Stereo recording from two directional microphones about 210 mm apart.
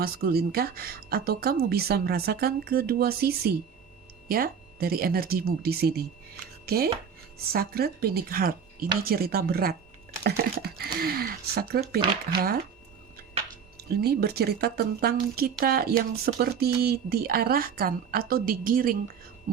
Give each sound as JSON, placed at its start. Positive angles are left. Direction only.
{"t": 0.0, "sound": "a woman's voice", "side_deg": -45}
{"t": 10.2, "sound": "typing", "side_deg": -50}
{"t": 11.0, "sound": "a woman's voice", "side_deg": -45}
{"t": 13.7, "sound": "a woman's voice", "side_deg": -50}